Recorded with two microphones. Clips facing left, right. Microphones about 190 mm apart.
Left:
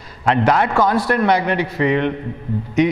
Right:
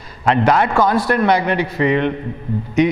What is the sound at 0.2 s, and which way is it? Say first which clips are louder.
A man's voice: right 1 dB; 15° right (ahead or behind).